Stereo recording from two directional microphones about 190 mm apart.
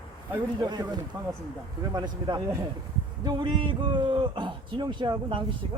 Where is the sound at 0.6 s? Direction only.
20° right (ahead or behind).